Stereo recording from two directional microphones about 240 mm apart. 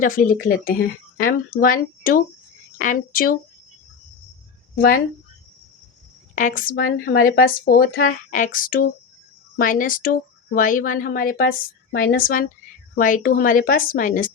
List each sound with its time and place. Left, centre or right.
0.0 s speech: left
4.7 s speech: left
6.3 s speech: left